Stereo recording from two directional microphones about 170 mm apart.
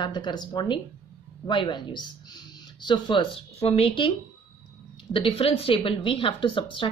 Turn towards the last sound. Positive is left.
turn(degrees=30)  # may be behind; listen again after turning